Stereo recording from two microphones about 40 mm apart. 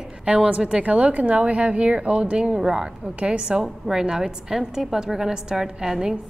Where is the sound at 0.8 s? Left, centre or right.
Right.